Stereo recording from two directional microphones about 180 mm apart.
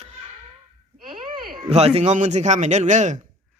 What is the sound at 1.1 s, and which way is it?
Speech, 25° right (ahead or behind).